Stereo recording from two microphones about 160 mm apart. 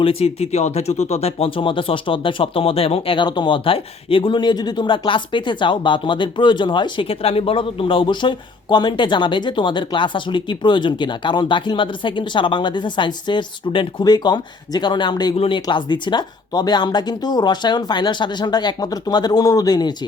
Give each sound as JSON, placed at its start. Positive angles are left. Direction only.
{"t": 0.0, "sound": "speech", "side_deg": 35}